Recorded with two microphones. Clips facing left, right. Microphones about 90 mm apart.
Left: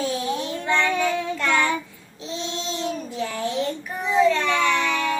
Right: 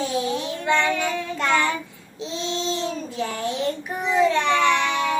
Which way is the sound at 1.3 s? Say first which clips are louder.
Even; 25° right (ahead or behind).